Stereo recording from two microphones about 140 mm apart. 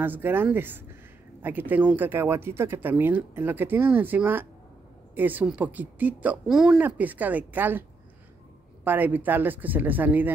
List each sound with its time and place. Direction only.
0.0 s speech: 15° right (ahead or behind)
8.8 s speech: 15° right (ahead or behind)